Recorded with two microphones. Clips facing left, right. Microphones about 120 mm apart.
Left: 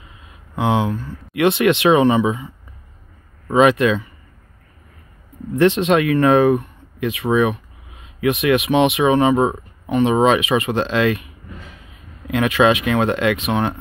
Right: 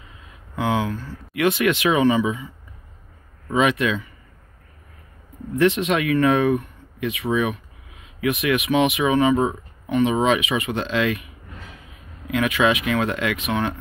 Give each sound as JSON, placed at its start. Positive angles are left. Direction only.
{"t": 0.6, "sound": "speech", "side_deg": 20}
{"t": 3.4, "sound": "speech", "side_deg": 40}
{"t": 5.6, "sound": "speech", "side_deg": 30}
{"t": 12.4, "sound": "speech", "side_deg": 35}